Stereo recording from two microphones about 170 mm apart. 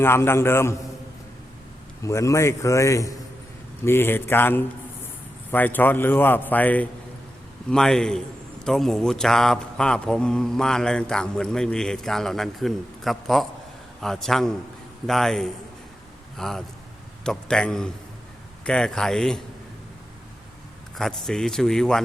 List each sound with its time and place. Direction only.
0.0 s a man's voice: 15° left (ahead or behind)
2.0 s a man's voice: 15° left (ahead or behind); by 19.4 s centre (ahead or behind)
21.0 s a man's voice: centre (ahead or behind)